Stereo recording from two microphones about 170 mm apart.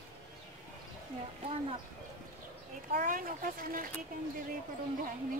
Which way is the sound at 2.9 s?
55° right (ahead or behind).